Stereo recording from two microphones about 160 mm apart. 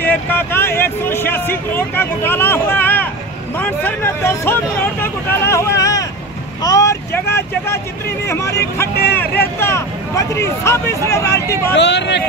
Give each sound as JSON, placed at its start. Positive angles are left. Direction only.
{"t": 0.0, "sound": "a sound", "side_deg": 10}
{"t": 3.5, "sound": "speech", "side_deg": 10}
{"t": 5.0, "sound": "vehicle", "side_deg": 15}
{"t": 8.3, "sound": "speech", "side_deg": 20}
{"t": 11.7, "sound": "speech", "side_deg": 90}